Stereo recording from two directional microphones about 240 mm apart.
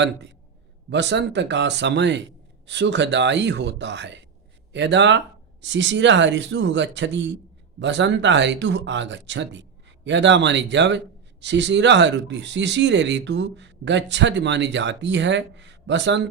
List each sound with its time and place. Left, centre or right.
0.9 s speech: right